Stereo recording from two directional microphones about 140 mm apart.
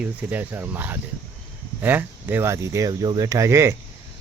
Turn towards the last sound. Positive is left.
turn(degrees=-20)  # may be behind; listen again after turning